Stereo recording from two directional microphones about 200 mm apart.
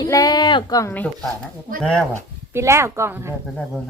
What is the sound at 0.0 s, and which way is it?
Speech, 20° left (ahead or behind).